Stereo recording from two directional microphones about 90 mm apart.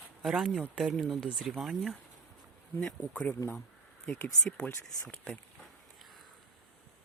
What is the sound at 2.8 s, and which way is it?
Speech, 10° left (ahead or behind).